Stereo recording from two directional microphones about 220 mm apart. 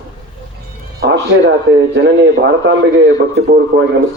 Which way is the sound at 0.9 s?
55° right (ahead or behind).